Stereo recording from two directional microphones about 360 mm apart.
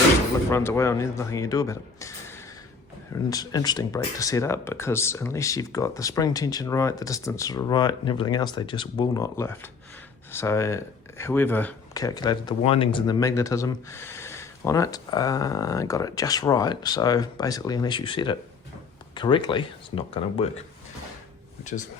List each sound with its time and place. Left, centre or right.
0.5 s speech: centre
3.2 s speech: centre
21.6 s speech: centre